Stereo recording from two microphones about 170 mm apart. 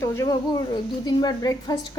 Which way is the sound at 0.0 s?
20° left (ahead or behind).